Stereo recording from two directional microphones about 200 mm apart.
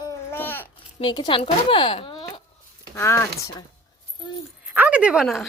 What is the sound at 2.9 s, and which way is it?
Speech, 15° left (ahead or behind).